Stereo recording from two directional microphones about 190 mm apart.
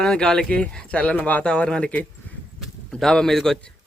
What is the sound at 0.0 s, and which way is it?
Speech, 5° left (ahead or behind).